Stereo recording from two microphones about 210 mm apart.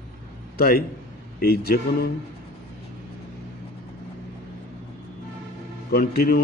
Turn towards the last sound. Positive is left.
turn(degrees=45)  # may be behind; listen again after turning